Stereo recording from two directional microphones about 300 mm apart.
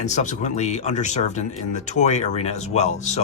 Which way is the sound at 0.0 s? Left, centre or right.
Left.